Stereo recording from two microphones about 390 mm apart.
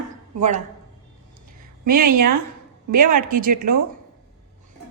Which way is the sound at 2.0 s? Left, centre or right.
Right.